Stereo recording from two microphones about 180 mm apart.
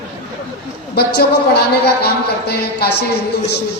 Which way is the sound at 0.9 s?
65° left (ahead or behind).